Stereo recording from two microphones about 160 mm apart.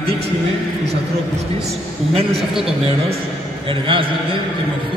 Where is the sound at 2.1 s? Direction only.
35° right (ahead or behind).